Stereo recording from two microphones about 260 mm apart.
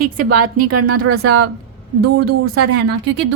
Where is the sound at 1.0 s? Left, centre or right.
Right.